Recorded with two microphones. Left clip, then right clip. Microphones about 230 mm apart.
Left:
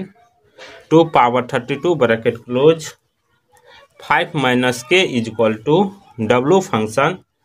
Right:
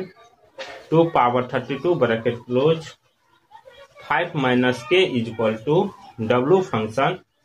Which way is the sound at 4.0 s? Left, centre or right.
Left.